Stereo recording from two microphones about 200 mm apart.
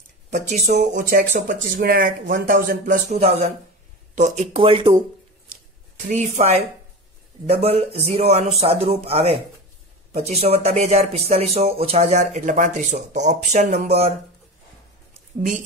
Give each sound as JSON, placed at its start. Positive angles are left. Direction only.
{"t": 0.3, "sound": "speech", "side_deg": -35}
{"t": 6.0, "sound": "speech", "side_deg": -35}